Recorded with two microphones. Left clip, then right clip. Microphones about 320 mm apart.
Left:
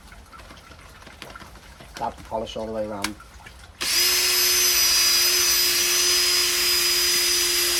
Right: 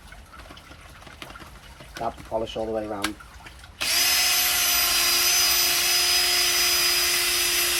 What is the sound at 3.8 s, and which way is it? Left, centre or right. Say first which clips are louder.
Drill: left 1 dB; centre.